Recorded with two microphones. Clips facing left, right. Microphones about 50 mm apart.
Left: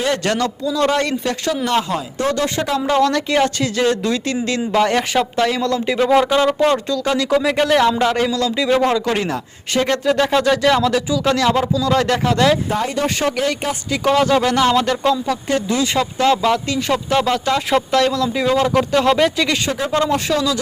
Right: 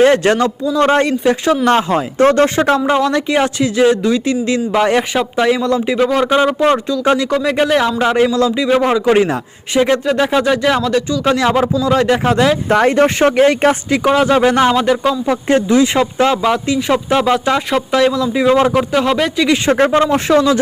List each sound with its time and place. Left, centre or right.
0.0 s speech: right
1.6 s speech: right
2.9 s speech: centre
7.2 s speech: centre; by 8.5 s right
8.5 s speech: centre
11.9 s speech: centre
12.6 s speech: right
13.1 s speech: right
14.0 s speech: centre
15.3 s speech: right
16.4 s speech: centre
19.9 s speech: right